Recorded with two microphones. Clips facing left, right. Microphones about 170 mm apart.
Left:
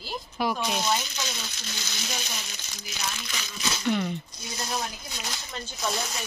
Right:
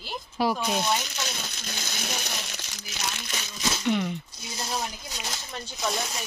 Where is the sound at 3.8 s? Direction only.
5° right (ahead or behind).